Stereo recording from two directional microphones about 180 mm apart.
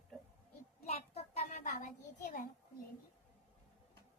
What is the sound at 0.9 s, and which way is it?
A child's voice, 35° left (ahead or behind).